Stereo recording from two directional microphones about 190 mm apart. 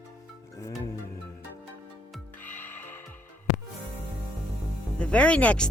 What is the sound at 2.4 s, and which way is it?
Music, 10° left (ahead or behind).